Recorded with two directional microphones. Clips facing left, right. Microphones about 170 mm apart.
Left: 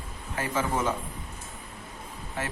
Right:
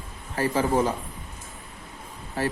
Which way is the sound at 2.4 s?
35° right (ahead or behind).